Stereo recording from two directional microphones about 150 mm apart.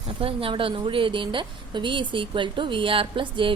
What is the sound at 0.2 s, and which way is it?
A woman's voice, 40° right (ahead or behind).